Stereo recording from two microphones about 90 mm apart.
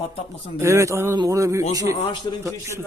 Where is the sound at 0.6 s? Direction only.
30° right (ahead or behind).